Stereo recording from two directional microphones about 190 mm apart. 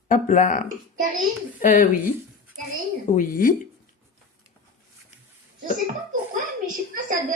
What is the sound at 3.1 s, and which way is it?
Speech, 45° left (ahead or behind).